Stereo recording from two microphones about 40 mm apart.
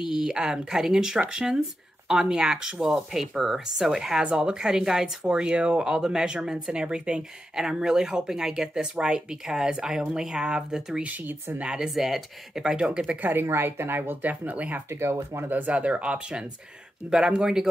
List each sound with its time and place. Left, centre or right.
0.1 s speech: centre
4.2 s speech: right
5.9 s speech: centre
11.0 s speech: right
11.8 s speech: centre
13.2 s speech: right
13.5 s a woman's voice: right
14.2 s speech: right
14.9 s speech: right
15.7 s speech: right